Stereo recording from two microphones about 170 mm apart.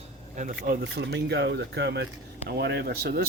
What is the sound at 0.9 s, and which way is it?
Speech, 90° right.